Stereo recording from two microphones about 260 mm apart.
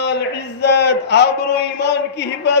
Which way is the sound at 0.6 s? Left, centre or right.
Left.